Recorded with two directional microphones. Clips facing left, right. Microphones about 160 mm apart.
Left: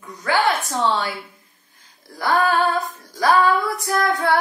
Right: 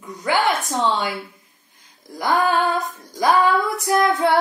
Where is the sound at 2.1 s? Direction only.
20° right (ahead or behind).